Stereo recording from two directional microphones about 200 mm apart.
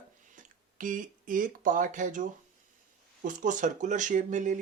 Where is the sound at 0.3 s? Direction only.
40° right (ahead or behind).